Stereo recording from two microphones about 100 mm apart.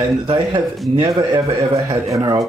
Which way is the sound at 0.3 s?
55° right (ahead or behind).